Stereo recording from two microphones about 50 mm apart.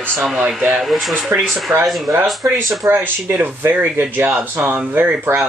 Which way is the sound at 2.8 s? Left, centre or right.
Right.